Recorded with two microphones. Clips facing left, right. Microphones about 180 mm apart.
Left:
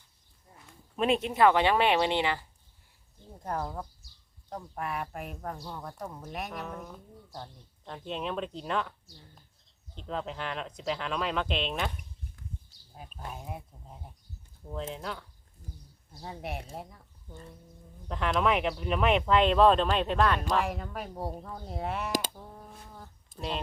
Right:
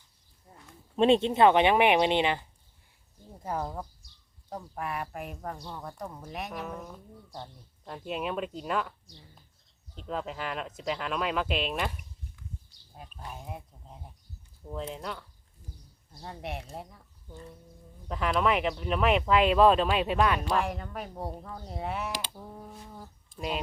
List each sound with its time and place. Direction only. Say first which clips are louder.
0.9 s speech: right 4 dB; 30° right (ahead or behind)
3.4 s speech: right 1 dB; 10° right (ahead or behind)
12.4 s a sound: left 1 dB; 40° left (ahead or behind)
12.9 s speech: left 1 dB; centre (ahead or behind)
16.2 s speech: even; centre (ahead or behind)
18.1 s speech: even; centre (ahead or behind)
22.4 s a sound: right 3 dB; 5° right (ahead or behind)